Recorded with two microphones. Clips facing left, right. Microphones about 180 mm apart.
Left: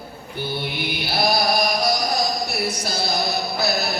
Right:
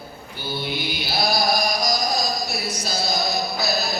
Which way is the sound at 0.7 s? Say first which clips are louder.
Left 1 dB; 60° left (ahead or behind).